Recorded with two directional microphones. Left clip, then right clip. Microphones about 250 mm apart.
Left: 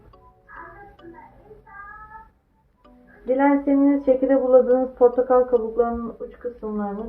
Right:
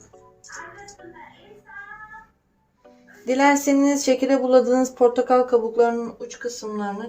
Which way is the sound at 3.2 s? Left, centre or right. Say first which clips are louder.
Right 1 dB; right.